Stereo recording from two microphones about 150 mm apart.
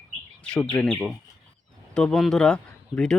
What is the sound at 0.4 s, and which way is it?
Speech, 5° left (ahead or behind).